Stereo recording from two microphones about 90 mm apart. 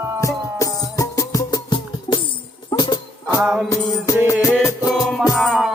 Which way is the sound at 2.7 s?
55° left (ahead or behind).